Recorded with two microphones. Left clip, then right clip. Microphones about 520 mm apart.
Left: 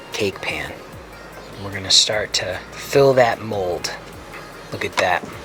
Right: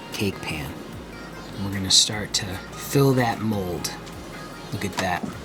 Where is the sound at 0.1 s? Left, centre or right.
Left.